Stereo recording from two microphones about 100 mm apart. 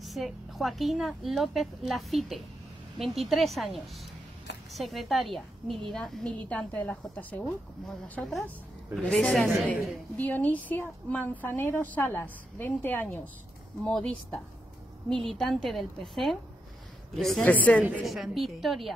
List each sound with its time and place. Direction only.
0.0 s a woman's voice: centre (ahead or behind); by 7.4 s 15° left (ahead or behind)
8.1 s a woman's voice: 5° left (ahead or behind)
9.7 s a woman's voice: 15° left (ahead or behind)
13.8 s a woman's voice: 5° left (ahead or behind)
17.5 s a woman's voice: 15° left (ahead or behind)
18.0 s a woman's voice: centre (ahead or behind)